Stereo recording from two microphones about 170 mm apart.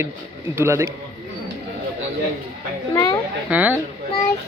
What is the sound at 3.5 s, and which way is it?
Speech, 10° right (ahead or behind).